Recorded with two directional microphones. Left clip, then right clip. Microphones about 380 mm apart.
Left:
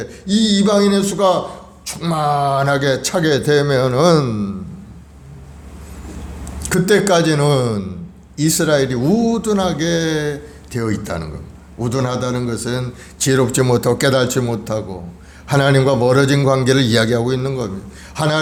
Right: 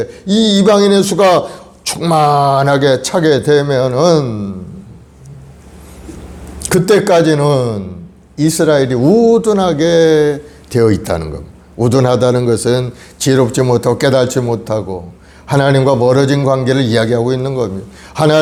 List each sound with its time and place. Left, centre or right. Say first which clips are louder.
0.0 s speech: right 5 dB; centre
6.6 s speech: right 4 dB; centre
13.1 s a man's voice: right 4 dB; centre
18.1 s speech: right 7 dB; right